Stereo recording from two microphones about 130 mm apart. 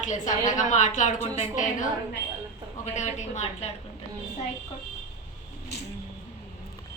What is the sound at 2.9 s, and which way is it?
Speech, 65° left (ahead or behind).